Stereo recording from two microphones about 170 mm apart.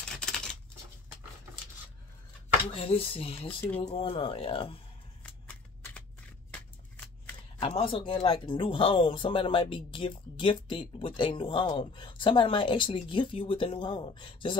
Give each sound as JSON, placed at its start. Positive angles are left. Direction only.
{"t": 2.7, "sound": "speech", "side_deg": 35}
{"t": 3.6, "sound": "speech", "side_deg": 15}
{"t": 3.9, "sound": "speech", "side_deg": 35}
{"t": 7.6, "sound": "speech", "side_deg": 35}